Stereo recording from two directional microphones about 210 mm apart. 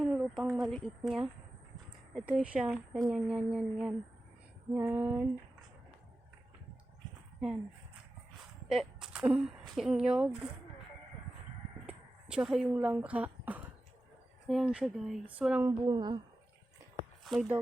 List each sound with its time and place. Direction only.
0.0 s a sound: 5° right (ahead or behind)
0.5 s a woman's voice: centre (ahead or behind)
4.7 s female singing: 10° right (ahead or behind)
8.7 s a woman's voice: centre (ahead or behind)
11.9 s a woman's voice: 5° right (ahead or behind)
15.8 s speech: 20° right (ahead or behind)
17.2 s speech: centre (ahead or behind)